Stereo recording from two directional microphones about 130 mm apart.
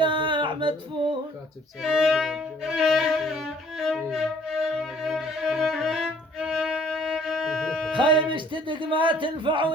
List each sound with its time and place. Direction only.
0.0 s a sound: 40° right (ahead or behind)
1.8 s violin: 5° right (ahead or behind)
7.9 s speech: 40° right (ahead or behind)